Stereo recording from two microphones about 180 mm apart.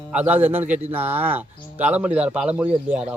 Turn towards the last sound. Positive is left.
turn(degrees=-5)  # may be behind; listen again after turning